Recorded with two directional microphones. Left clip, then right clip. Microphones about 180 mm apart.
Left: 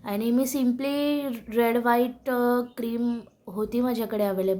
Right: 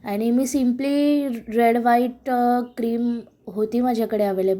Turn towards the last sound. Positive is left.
turn(degrees=-15)  # may be behind; listen again after turning